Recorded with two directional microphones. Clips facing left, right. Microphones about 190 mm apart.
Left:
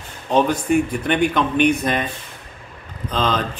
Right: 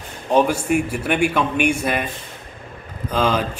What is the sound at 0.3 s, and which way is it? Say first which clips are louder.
A man's voice: even; 10° right (ahead or behind).